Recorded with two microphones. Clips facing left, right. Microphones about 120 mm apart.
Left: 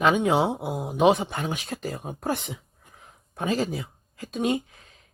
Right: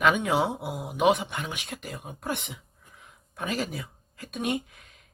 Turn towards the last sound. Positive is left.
turn(degrees=30)  # may be behind; listen again after turning